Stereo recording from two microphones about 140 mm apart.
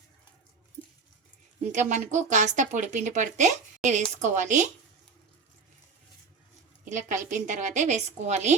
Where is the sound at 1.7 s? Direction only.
60° right (ahead or behind).